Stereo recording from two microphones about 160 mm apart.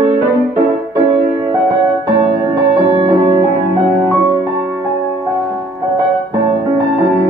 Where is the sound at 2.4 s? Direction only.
20° right (ahead or behind).